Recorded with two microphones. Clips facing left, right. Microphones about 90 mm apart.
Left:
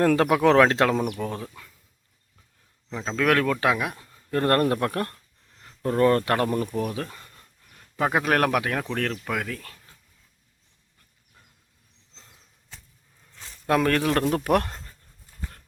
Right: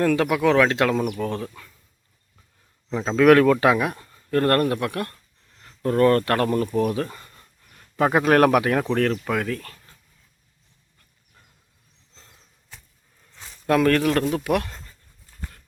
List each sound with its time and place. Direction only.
0.0 s speech: 35° left (ahead or behind)
0.9 s speech: 20° left (ahead or behind)
1.2 s speech: 5° left (ahead or behind)
2.9 s speech: 10° right (ahead or behind)
4.3 s speech: 20° left (ahead or behind)
4.7 s speech: 35° left (ahead or behind)
5.6 s speech: 15° left (ahead or behind)
6.7 s speech: 5° left (ahead or behind)
13.7 s speech: 20° left (ahead or behind)
14.3 s speech: 40° left (ahead or behind)